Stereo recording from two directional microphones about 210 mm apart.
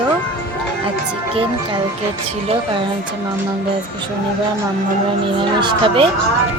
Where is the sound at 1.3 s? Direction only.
25° right (ahead or behind).